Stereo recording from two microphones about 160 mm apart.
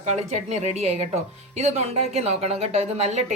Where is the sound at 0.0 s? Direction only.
45° right (ahead or behind).